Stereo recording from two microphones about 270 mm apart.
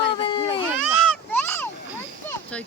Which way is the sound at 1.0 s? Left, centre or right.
Centre.